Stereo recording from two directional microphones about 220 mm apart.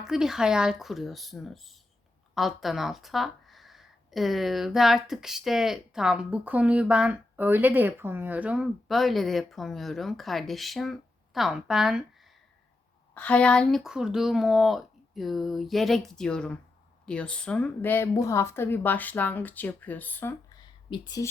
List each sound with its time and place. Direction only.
0.0 s a woman's voice: centre (ahead or behind); by 21.2 s 15° left (ahead or behind)